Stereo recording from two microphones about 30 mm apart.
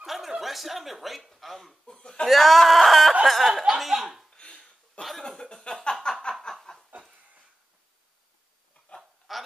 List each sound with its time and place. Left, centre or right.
0.0 s chuckle: centre
0.4 s speech: centre
1.9 s speech: left
2.2 s speech: centre
4.4 s a sound: left
5.4 s speech: left
6.0 s snicker: left
9.3 s a sound: centre